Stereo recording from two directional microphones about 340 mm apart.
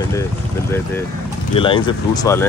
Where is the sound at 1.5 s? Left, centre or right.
Centre.